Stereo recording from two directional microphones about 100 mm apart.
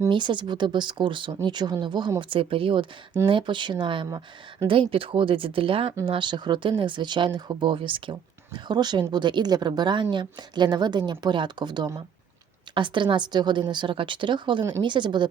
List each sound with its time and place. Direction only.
0.1 s speech: 50° right (ahead or behind)
2.3 s speech: 65° right (ahead or behind)
6.1 s speech: 55° right (ahead or behind)